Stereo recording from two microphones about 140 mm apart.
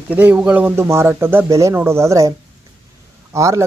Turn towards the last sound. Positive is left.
turn(degrees=-20)  # may be behind; listen again after turning